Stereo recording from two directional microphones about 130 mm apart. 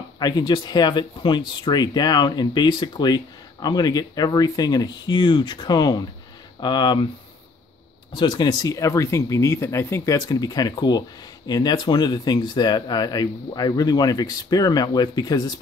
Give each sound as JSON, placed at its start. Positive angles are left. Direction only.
{"t": 0.2, "sound": "speech", "side_deg": 30}
{"t": 8.1, "sound": "speech", "side_deg": 35}